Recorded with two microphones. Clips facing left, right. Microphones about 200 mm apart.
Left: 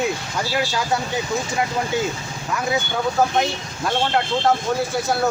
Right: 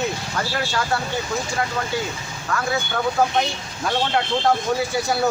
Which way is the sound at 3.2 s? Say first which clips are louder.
Left 2 dB; 5° left (ahead or behind).